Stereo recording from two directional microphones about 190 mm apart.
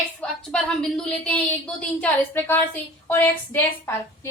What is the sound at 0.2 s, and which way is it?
Speech, 5° left (ahead or behind).